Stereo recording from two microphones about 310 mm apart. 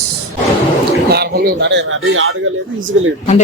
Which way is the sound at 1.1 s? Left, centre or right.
Right.